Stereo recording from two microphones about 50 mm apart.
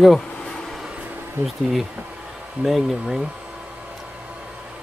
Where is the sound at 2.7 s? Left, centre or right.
Centre.